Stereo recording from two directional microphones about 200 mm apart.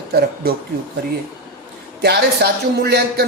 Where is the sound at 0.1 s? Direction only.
50° right (ahead or behind).